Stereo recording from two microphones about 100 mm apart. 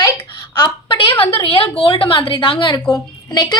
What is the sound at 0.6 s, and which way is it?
Speech, 55° left (ahead or behind).